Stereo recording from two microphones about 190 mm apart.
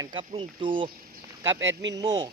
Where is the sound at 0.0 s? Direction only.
25° right (ahead or behind).